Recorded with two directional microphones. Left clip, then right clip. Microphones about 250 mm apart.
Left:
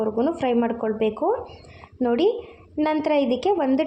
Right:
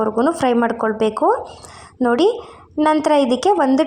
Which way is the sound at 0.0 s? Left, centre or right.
Centre.